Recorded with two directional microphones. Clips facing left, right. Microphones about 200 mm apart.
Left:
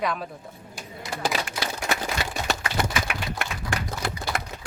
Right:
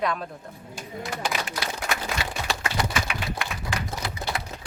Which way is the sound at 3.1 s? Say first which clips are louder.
Even; 55° left (ahead or behind).